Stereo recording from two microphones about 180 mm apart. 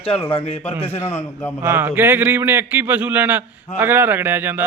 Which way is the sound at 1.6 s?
10° right (ahead or behind).